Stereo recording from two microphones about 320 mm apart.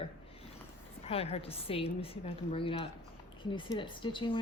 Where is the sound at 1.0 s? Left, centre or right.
Centre.